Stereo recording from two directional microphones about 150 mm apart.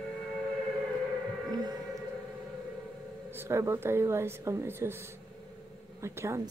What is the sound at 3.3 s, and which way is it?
Speech, 15° right (ahead or behind).